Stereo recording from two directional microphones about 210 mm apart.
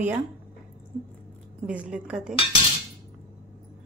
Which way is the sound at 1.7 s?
5° right (ahead or behind).